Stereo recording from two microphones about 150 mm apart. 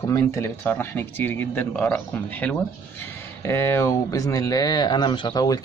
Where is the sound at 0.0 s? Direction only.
20° left (ahead or behind).